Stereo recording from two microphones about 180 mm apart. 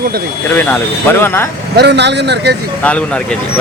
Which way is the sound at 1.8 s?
70° right (ahead or behind).